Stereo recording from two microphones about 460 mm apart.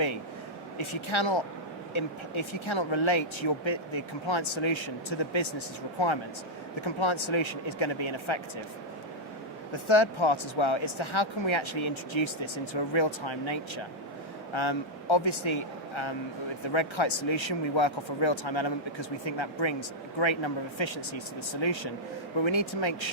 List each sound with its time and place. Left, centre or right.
0.8 s speech: left
6.8 s speech: left
9.9 s speech: left
16.7 s speech: left